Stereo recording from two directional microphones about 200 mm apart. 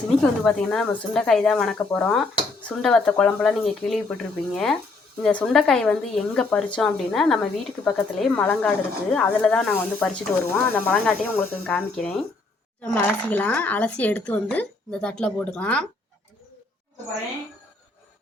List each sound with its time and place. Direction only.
0.2 s speech: 5° left (ahead or behind)